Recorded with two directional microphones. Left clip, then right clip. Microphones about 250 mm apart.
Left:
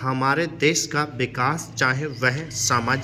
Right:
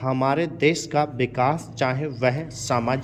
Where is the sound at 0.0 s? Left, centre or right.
Centre.